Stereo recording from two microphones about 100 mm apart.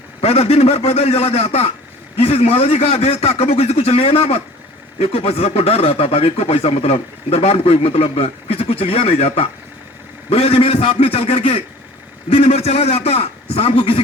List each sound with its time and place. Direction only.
0.2 s a man's voice: 90° left; by 14.0 s 65° left (ahead or behind)